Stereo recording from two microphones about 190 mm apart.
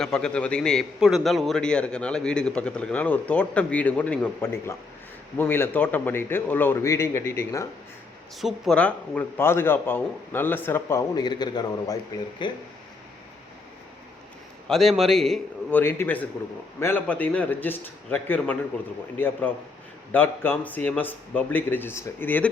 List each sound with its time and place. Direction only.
0.0 s a man's voice: 5° left (ahead or behind)
8.4 s a man's voice: centre (ahead or behind); by 12.6 s 25° left (ahead or behind)
14.7 s a man's voice: centre (ahead or behind)
15.8 s a man's voice: 10° left (ahead or behind)